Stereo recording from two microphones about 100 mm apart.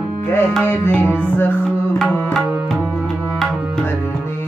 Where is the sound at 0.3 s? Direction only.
20° left (ahead or behind).